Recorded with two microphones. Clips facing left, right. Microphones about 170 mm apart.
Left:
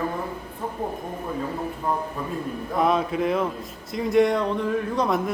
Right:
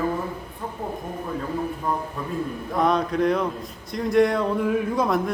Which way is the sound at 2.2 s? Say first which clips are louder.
Right 1 dB; centre (ahead or behind).